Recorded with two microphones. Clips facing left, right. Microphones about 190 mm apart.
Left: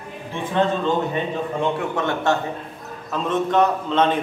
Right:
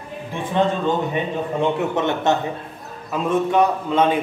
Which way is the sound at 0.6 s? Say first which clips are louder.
Right 1 dB; 15° right (ahead or behind).